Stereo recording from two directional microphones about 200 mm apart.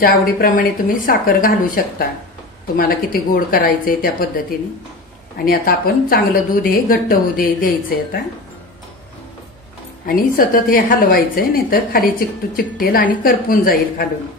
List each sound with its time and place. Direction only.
0.0 s a woman's voice: 45° left (ahead or behind)
2.8 s a woman's voice: 45° left (ahead or behind)
5.4 s a woman's voice: 45° left (ahead or behind)
10.0 s a woman's voice: 45° left (ahead or behind)